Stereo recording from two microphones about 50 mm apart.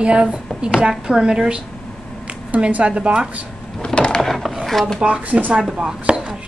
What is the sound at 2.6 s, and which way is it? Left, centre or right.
Speech, right.